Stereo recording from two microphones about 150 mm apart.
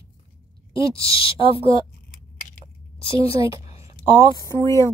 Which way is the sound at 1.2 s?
35° left (ahead or behind).